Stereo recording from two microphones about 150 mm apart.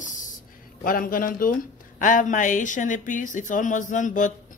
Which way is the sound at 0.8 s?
70° left (ahead or behind).